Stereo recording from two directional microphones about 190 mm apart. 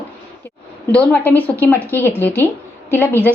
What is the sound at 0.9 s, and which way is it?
A woman's voice, 10° left (ahead or behind).